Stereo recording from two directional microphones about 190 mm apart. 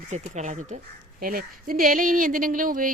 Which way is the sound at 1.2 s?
50° right (ahead or behind).